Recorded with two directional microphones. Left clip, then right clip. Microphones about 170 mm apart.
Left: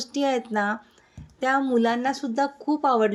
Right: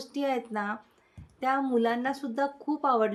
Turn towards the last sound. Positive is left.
turn(degrees=20)  # may be behind; listen again after turning